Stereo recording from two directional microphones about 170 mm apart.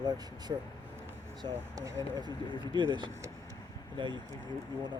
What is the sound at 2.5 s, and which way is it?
Speech, 25° left (ahead or behind).